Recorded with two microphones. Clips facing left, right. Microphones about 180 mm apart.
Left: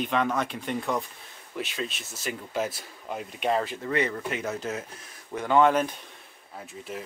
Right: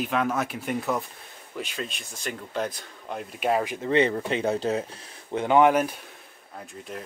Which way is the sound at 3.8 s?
25° right (ahead or behind).